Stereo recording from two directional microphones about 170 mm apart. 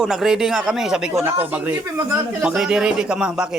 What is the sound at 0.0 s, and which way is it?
A man's voice, 5° right (ahead or behind).